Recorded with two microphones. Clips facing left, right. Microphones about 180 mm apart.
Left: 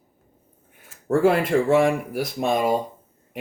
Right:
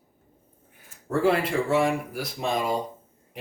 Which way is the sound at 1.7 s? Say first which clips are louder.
Left 3 dB; 50° left (ahead or behind).